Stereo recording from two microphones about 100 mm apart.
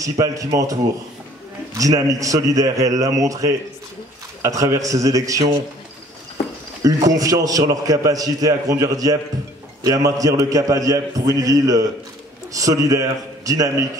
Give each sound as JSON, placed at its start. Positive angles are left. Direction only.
{"t": 0.0, "sound": "a man's voice", "side_deg": -35}
{"t": 6.8, "sound": "a man's voice", "side_deg": -35}